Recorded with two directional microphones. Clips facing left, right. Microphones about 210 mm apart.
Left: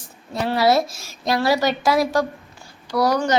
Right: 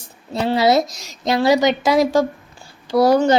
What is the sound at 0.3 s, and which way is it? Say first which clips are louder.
A woman's voice: right 2 dB; 25° right (ahead or behind).